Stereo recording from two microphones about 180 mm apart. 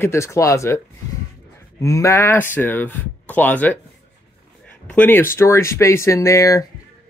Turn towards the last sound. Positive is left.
turn(degrees=20)  # may be behind; listen again after turning